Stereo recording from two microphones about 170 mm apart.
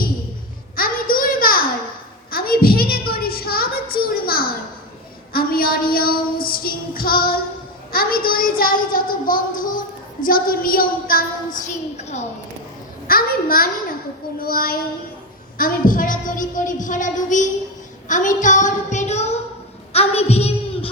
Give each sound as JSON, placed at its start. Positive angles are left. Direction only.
{"t": 0.8, "sound": "a sound", "side_deg": 55}
{"t": 5.3, "sound": "child singing", "side_deg": 60}
{"t": 13.1, "sound": "a child's voice", "side_deg": 60}
{"t": 14.3, "sound": "child singing", "side_deg": 60}
{"t": 15.5, "sound": "a woman's voice", "side_deg": 55}
{"t": 19.9, "sound": "a sound", "side_deg": 35}